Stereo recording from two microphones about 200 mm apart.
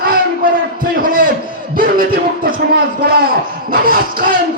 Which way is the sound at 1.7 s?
45° right (ahead or behind).